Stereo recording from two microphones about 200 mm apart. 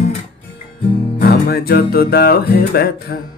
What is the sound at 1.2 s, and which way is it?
Music, 55° left (ahead or behind).